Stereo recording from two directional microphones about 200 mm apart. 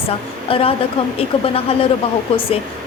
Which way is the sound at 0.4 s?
25° left (ahead or behind).